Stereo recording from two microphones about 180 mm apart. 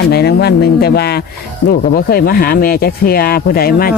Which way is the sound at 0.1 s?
65° left (ahead or behind).